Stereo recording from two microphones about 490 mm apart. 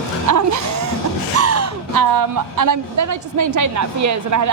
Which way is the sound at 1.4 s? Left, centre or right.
Right.